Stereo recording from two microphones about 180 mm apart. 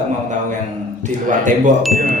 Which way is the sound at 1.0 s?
45° right (ahead or behind).